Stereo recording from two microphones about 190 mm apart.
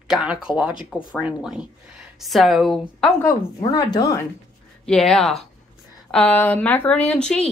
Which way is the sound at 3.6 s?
20° left (ahead or behind).